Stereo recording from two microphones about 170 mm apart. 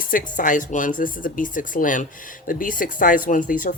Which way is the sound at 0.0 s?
55° left (ahead or behind).